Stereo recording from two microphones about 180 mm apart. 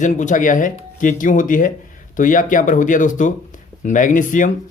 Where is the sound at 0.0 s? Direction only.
45° left (ahead or behind).